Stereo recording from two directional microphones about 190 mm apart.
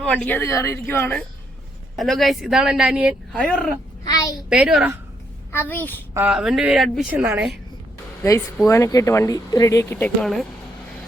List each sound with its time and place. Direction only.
0.0 s speech: 5° left (ahead or behind)
2.0 s speech: centre (ahead or behind)
3.3 s speech: 5° left (ahead or behind)
4.0 s a sound: 20° left (ahead or behind)
4.4 s a woman's voice: 5° right (ahead or behind)
5.5 s speech: 10° left (ahead or behind)
6.1 s speech: 5° right (ahead or behind)
8.2 s speech: 15° left (ahead or behind)